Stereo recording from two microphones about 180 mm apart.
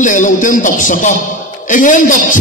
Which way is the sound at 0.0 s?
45° left (ahead or behind).